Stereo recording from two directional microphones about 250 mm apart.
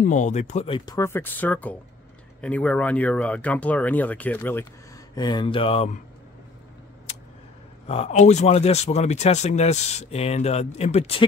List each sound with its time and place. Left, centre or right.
0.0 s speech: left
7.8 s speech: left